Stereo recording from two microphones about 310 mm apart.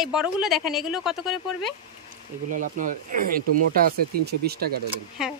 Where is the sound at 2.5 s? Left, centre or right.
Right.